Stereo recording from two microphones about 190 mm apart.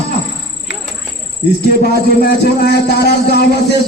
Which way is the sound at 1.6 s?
55° left (ahead or behind).